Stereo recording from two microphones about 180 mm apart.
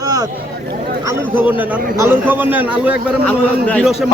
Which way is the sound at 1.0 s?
15° right (ahead or behind).